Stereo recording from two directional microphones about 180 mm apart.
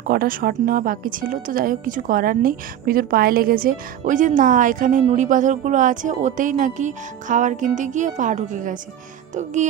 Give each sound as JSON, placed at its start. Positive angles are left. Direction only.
{"t": 0.0, "sound": "speech", "side_deg": -55}
{"t": 9.3, "sound": "music", "side_deg": -40}